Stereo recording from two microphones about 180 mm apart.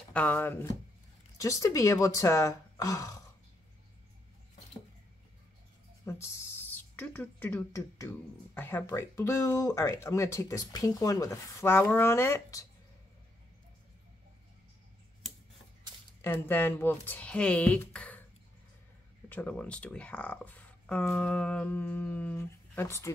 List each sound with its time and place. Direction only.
0.1 s speech: 10° left (ahead or behind)
6.0 s speech: 15° left (ahead or behind)
16.2 s speech: 10° left (ahead or behind)
19.2 s speech: 10° left (ahead or behind)